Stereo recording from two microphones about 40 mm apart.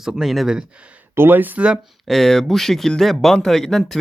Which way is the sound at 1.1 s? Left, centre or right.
Right.